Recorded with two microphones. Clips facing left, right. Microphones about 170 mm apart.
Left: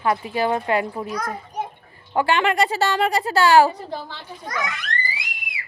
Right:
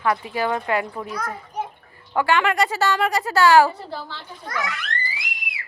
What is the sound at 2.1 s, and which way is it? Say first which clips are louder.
Speech: even; 25° left (ahead or behind).